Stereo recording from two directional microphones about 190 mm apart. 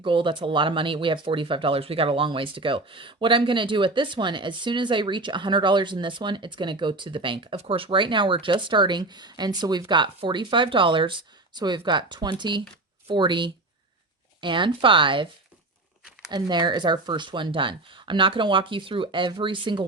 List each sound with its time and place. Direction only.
0.0 s speech: 25° right (ahead or behind)
16.3 s speech: 25° right (ahead or behind)